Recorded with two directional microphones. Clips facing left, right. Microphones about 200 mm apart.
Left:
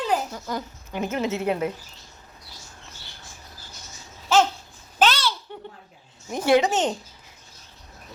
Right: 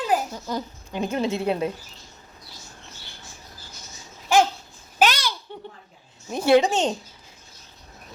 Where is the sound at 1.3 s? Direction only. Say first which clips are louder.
Right 1 dB; 15° left (ahead or behind).